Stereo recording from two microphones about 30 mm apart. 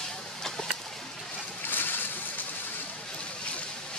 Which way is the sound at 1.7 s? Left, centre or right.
Left.